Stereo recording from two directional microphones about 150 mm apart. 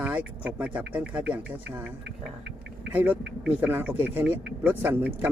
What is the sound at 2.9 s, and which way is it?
Speech, 10° right (ahead or behind).